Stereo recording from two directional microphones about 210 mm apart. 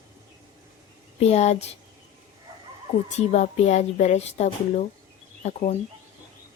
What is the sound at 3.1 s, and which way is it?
A woman's voice, 35° left (ahead or behind).